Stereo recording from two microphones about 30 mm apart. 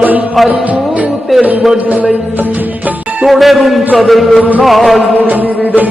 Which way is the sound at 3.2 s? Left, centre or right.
Centre.